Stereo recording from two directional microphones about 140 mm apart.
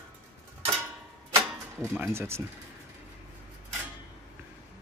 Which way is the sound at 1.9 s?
15° right (ahead or behind).